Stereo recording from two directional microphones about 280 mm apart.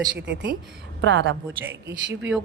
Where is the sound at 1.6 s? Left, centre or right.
Centre.